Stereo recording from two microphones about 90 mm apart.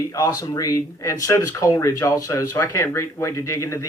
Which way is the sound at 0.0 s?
40° left (ahead or behind).